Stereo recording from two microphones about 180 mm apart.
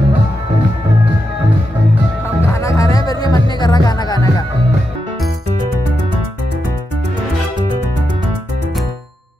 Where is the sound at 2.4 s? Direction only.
15° left (ahead or behind).